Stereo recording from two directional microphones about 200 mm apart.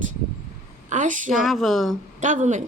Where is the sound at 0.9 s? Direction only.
40° right (ahead or behind).